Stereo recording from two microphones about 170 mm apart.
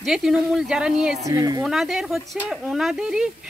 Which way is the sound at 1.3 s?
20° right (ahead or behind).